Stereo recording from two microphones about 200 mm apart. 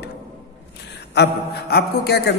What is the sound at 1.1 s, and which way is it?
A man's voice, 55° left (ahead or behind).